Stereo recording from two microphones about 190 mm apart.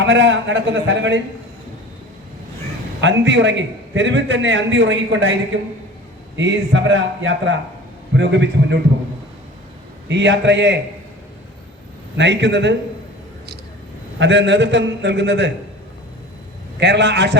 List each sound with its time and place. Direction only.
0.0 s a man's voice: 70° right (ahead or behind)
3.0 s a man's voice: 70° right (ahead or behind)
8.1 s a man's voice: 70° right (ahead or behind)
10.1 s a man's voice: 70° right (ahead or behind)
12.1 s a man's voice: 70° right (ahead or behind)
14.2 s a man's voice: 70° right (ahead or behind)
16.8 s a man's voice: 65° right (ahead or behind)